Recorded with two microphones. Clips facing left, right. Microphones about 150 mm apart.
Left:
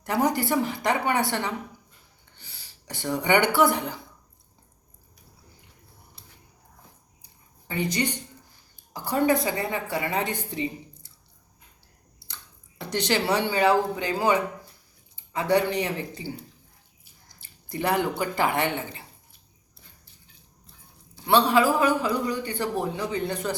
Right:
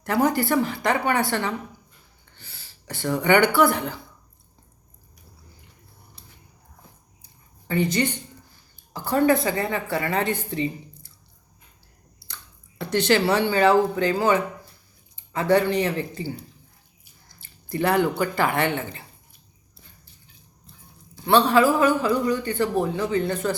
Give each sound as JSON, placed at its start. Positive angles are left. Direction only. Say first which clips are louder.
{"t": 0.0, "sound": "a woman's voice", "louder": "right 3 dB", "side_deg": 15}
{"t": 7.7, "sound": "a woman's voice", "louder": "right 4 dB", "side_deg": 15}
{"t": 12.8, "sound": "a woman's voice", "louder": "right 5 dB", "side_deg": 15}
{"t": 17.4, "sound": "speech", "louder": "right 4 dB", "side_deg": 15}
{"t": 21.2, "sound": "a woman's voice", "louder": "right 2 dB", "side_deg": 15}